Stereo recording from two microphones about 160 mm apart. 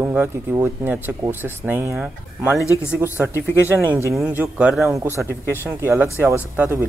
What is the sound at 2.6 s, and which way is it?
Speech, 20° left (ahead or behind).